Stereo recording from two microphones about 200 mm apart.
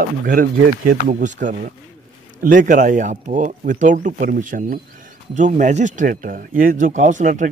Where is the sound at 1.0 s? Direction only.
40° right (ahead or behind).